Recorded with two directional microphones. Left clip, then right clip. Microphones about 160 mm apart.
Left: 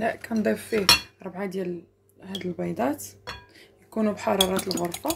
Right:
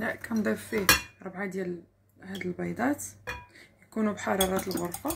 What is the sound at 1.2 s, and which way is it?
Speech, 40° left (ahead or behind).